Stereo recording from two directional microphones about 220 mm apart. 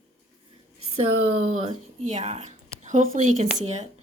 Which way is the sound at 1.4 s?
30° right (ahead or behind).